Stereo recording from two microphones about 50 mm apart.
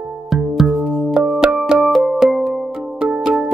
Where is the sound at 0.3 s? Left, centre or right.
Centre.